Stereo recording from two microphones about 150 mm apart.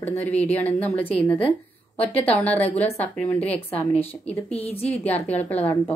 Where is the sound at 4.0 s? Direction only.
10° left (ahead or behind).